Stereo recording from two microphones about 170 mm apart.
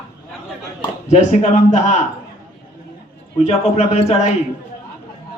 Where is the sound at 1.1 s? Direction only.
40° left (ahead or behind).